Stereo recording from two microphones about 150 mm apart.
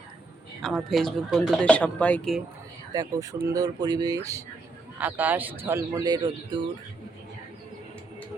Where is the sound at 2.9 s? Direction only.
25° right (ahead or behind).